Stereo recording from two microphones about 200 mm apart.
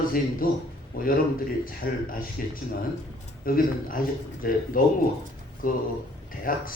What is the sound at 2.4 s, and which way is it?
Speech, 45° left (ahead or behind).